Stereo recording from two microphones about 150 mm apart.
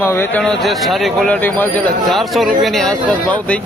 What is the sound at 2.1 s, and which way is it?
Speech, centre (ahead or behind).